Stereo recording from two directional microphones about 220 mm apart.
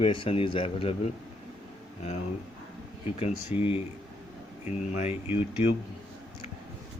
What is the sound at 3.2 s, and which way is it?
Speech, 25° left (ahead or behind).